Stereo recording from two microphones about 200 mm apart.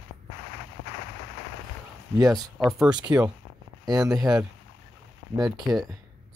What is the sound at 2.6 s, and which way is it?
Speech, centre (ahead or behind).